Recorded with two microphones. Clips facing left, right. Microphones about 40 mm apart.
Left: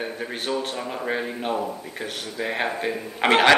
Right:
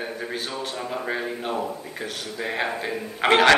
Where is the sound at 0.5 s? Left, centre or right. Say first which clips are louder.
Left 2 dB; centre.